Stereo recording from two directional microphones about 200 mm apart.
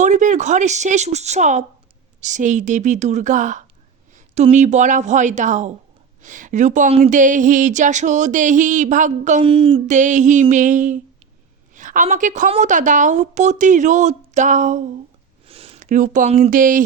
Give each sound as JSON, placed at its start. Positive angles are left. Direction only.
{"t": 0.0, "sound": "speech", "side_deg": -40}